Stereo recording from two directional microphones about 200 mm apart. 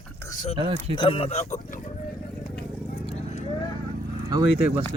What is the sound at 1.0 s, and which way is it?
Speech, 25° left (ahead or behind).